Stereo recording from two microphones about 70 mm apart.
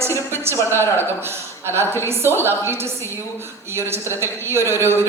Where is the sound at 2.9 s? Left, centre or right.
Left.